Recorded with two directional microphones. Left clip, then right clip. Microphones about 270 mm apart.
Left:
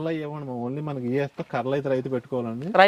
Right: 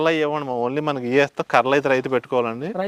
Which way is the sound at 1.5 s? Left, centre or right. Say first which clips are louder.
Right 8 dB; centre.